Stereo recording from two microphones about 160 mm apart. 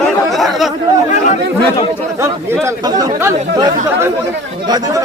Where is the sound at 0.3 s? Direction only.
Centre (ahead or behind).